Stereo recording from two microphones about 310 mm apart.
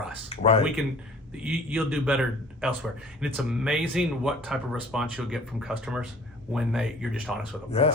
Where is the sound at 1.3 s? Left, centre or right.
Centre.